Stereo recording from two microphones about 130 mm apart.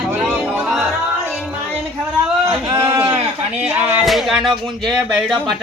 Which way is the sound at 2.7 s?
20° right (ahead or behind).